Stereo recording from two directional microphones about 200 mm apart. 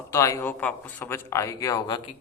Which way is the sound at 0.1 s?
15° left (ahead or behind).